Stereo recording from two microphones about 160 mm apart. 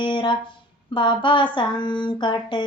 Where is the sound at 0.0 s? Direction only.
30° left (ahead or behind).